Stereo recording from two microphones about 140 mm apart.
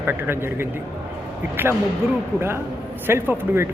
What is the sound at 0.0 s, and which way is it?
Speech, 15° right (ahead or behind).